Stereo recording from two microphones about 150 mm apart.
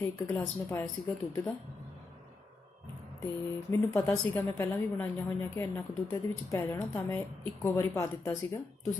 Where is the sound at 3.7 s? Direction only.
15° left (ahead or behind).